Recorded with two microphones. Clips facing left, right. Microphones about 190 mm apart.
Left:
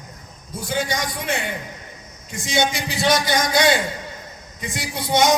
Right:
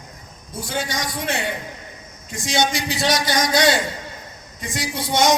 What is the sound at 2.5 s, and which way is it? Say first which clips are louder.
A man's voice: even; 55° left (ahead or behind).